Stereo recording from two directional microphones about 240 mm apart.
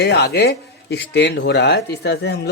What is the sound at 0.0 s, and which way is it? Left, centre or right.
Speech, left.